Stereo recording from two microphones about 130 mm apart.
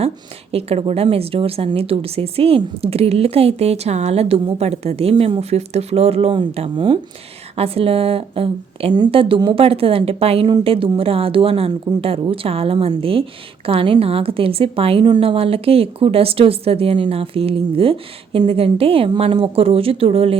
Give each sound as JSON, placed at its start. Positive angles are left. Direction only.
{"t": 0.5, "sound": "a woman's voice", "side_deg": -50}
{"t": 7.5, "sound": "a woman's voice", "side_deg": -50}